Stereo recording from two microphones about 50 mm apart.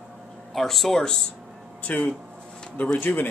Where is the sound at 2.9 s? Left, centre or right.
Left.